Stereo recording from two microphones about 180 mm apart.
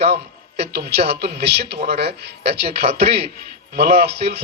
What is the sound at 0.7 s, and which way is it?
A man's voice, 65° right (ahead or behind).